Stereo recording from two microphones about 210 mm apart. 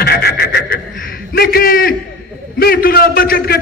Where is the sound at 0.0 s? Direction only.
50° left (ahead or behind).